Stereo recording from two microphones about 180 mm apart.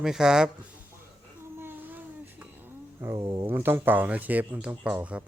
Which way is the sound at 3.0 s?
20° right (ahead or behind).